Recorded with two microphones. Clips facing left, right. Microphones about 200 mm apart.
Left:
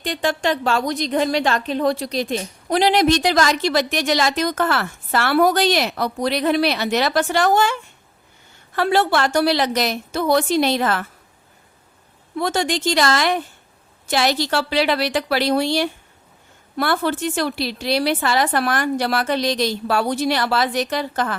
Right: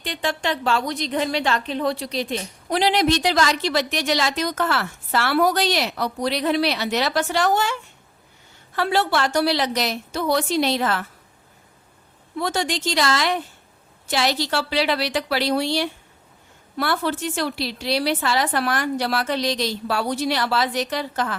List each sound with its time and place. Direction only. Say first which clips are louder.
0.0 s a woman's voice: left 4 dB; 45° left (ahead or behind)
12.4 s a woman's voice: left 3 dB; 50° left (ahead or behind)